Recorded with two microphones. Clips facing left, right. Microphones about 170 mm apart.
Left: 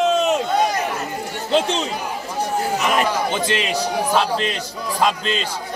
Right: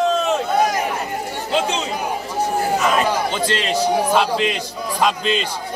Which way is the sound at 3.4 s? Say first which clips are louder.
Right 1 dB; 15° left (ahead or behind).